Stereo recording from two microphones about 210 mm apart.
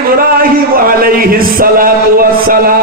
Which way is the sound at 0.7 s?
45° right (ahead or behind).